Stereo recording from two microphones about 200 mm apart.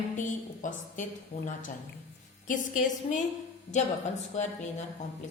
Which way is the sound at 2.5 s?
40° left (ahead or behind).